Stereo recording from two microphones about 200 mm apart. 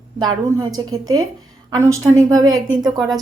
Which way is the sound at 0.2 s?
15° right (ahead or behind).